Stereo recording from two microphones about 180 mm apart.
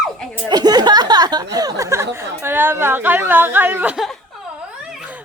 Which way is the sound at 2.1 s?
10° right (ahead or behind).